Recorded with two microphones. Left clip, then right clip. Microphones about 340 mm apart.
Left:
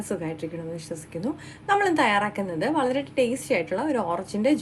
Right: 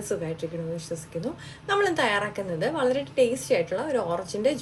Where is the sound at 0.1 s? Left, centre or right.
Left.